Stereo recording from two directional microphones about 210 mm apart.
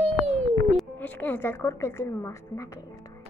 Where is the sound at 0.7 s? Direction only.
10° left (ahead or behind).